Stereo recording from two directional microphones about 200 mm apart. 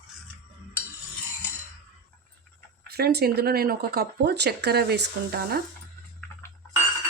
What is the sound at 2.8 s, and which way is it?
Speech, 50° right (ahead or behind).